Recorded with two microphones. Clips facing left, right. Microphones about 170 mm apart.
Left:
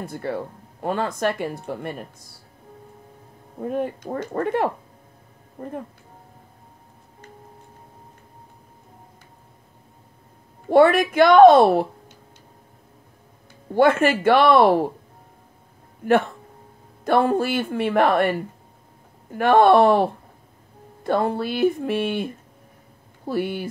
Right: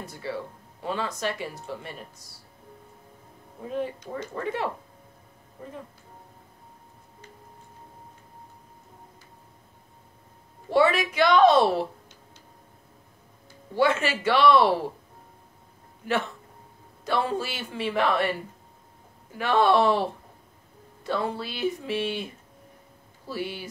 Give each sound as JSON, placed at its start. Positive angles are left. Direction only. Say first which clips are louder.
{"t": 0.0, "sound": "speech", "louder": "left 6 dB", "side_deg": 55}
{"t": 3.5, "sound": "speech", "louder": "left 5 dB", "side_deg": 50}
{"t": 10.7, "sound": "speech", "louder": "left 7 dB", "side_deg": 55}
{"t": 13.7, "sound": "speech", "louder": "left 7 dB", "side_deg": 55}
{"t": 16.0, "sound": "speech", "louder": "left 9 dB", "side_deg": 55}